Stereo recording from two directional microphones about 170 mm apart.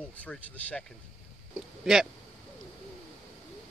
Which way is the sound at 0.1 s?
10° left (ahead or behind).